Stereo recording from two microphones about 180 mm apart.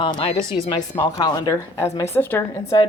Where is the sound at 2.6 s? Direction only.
30° left (ahead or behind).